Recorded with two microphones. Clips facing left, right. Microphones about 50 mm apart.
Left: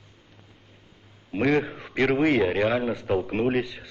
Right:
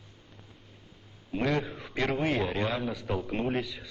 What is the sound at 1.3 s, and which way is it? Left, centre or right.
Speech, left.